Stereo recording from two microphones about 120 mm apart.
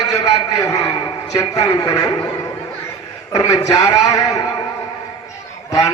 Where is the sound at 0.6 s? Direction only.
25° left (ahead or behind).